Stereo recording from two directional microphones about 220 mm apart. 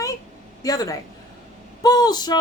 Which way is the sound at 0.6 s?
15° left (ahead or behind).